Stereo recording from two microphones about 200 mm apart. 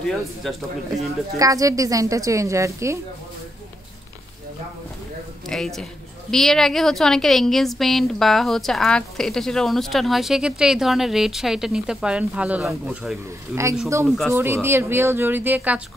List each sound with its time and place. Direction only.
0.0 s a woman's voice: centre (ahead or behind)
1.4 s speech: 15° right (ahead or behind)
5.5 s a woman's voice: centre (ahead or behind)
14.3 s speech: 10° right (ahead or behind)